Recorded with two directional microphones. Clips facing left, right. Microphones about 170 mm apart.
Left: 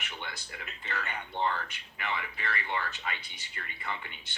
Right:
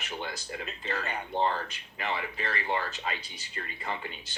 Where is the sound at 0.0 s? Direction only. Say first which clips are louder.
Right 6 dB; 40° right (ahead or behind).